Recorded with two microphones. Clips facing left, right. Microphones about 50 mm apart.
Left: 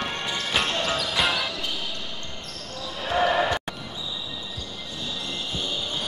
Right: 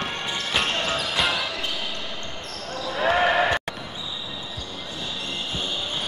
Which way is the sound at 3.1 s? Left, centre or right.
Right.